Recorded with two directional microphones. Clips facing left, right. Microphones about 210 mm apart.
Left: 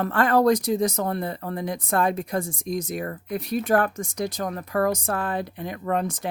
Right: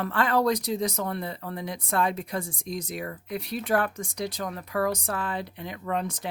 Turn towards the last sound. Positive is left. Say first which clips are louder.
# left 4 dB
turn(degrees=45)  # may be behind; listen again after turning